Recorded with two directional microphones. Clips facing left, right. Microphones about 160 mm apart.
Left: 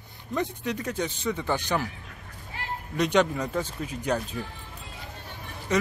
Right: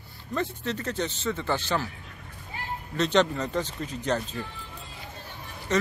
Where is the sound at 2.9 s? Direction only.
10° left (ahead or behind).